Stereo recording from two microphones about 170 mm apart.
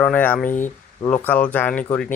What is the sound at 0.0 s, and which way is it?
Speech, 10° left (ahead or behind).